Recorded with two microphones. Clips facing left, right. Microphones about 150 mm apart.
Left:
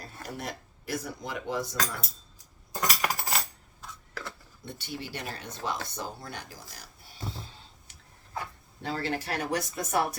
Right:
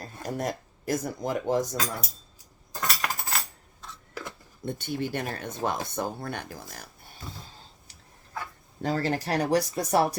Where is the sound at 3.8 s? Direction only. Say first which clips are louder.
Even; 10° left (ahead or behind).